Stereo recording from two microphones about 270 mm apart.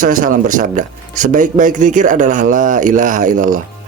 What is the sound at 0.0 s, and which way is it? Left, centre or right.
Speech, right.